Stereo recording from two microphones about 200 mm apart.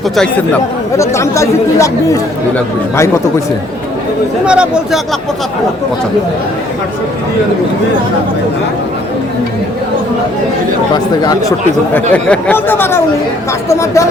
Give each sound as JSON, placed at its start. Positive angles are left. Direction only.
{"t": 0.2, "sound": "speech", "side_deg": 10}
{"t": 4.4, "sound": "speech", "side_deg": -5}
{"t": 10.9, "sound": "speech", "side_deg": 20}
{"t": 12.1, "sound": "speech", "side_deg": 10}